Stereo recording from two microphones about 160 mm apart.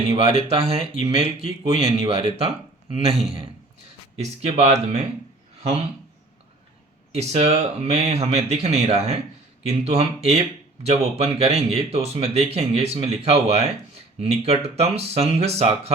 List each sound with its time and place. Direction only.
0.1 s speech: 40° right (ahead or behind)
7.1 s speech: 40° right (ahead or behind)